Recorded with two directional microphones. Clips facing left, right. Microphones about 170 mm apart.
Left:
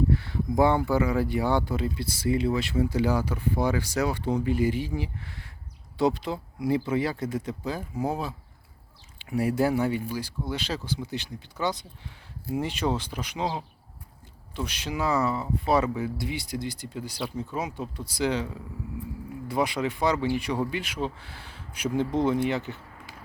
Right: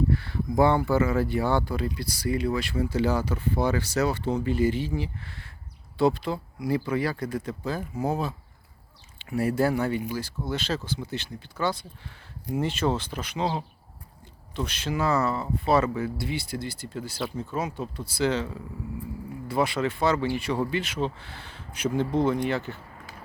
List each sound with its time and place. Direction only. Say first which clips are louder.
0.1 s a sound: left 1 dB; 20° left (ahead or behind)
0.9 s speech: right 1 dB; 15° left (ahead or behind)
19.5 s speech: right 1 dB; 15° left (ahead or behind)